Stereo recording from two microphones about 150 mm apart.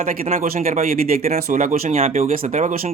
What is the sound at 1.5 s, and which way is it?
Speech, 55° right (ahead or behind).